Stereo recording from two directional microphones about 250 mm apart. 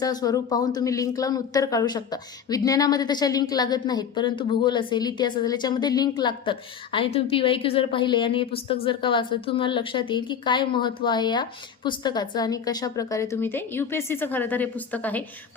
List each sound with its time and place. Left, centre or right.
0.0 s a woman's voice: centre